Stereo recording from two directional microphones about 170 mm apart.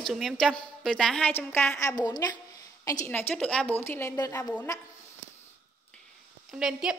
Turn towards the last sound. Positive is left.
turn(degrees=-5)  # may be behind; listen again after turning